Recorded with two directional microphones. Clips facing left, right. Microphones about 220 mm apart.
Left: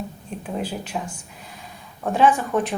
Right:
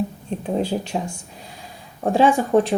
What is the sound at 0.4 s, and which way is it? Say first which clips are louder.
Speech: right 6 dB; 30° right (ahead or behind).